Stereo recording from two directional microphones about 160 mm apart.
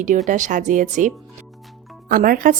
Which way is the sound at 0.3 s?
50° right (ahead or behind).